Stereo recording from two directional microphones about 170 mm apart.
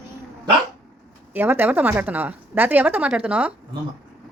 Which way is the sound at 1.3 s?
10° right (ahead or behind).